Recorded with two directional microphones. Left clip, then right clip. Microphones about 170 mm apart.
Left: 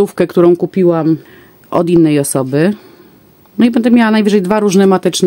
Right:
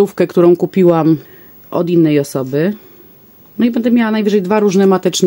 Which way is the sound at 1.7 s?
30° left (ahead or behind).